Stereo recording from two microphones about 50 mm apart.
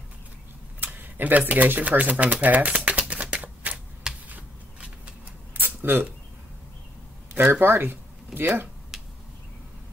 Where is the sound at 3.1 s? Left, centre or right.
Right.